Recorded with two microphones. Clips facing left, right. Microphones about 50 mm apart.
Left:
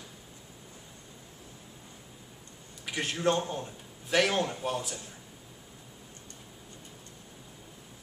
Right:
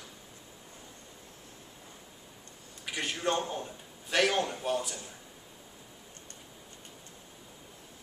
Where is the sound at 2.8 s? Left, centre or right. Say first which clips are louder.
Left 3 dB; centre.